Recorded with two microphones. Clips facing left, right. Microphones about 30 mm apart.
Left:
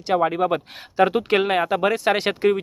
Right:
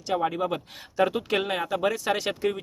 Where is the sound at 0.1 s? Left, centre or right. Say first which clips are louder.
Left 6 dB; left.